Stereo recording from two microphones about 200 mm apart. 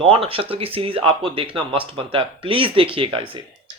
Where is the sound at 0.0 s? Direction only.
30° right (ahead or behind).